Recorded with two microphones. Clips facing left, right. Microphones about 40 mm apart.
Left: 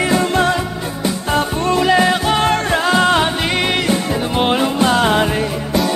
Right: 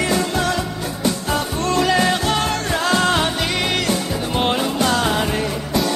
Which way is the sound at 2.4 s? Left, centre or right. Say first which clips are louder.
Left 5 dB; left.